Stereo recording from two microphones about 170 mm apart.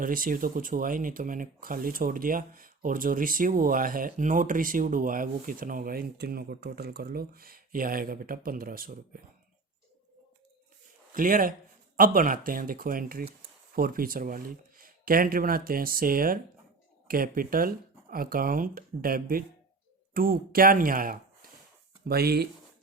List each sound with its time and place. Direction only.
0.0 s speech: 55° right (ahead or behind)
11.1 s speech: 55° right (ahead or behind)
22.0 s speech: 70° right (ahead or behind)